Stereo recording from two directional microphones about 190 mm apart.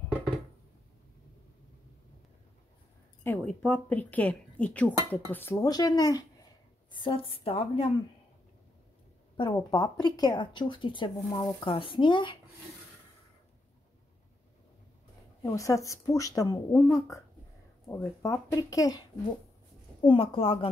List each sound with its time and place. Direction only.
3.3 s speech: 5° left (ahead or behind); by 7.9 s 30° left (ahead or behind)
9.4 s speech: 20° left (ahead or behind)
15.5 s speech: 15° left (ahead or behind)